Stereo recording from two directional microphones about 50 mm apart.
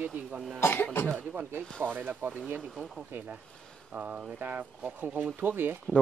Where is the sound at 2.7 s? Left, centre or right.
Centre.